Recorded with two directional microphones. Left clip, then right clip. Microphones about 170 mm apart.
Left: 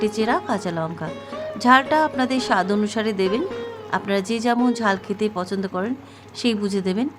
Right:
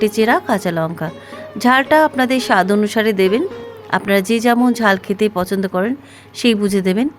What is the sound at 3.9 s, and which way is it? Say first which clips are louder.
Speech: right 8 dB; 40° right (ahead or behind).